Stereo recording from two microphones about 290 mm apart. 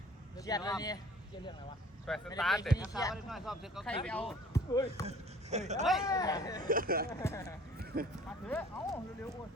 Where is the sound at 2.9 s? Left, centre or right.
Centre.